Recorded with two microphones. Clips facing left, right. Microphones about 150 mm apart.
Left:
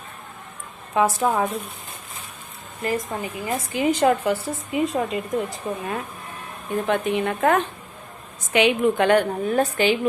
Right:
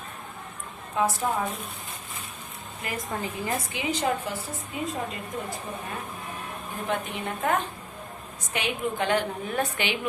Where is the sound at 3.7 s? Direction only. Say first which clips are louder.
Left 11 dB; 55° left (ahead or behind); by 4.7 s 70° left (ahead or behind).